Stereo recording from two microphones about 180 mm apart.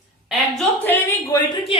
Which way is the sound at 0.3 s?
5° left (ahead or behind).